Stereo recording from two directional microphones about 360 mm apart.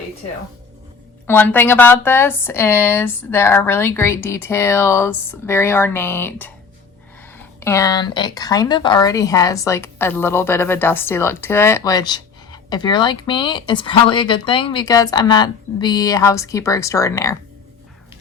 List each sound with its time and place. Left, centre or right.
1.3 s speech: centre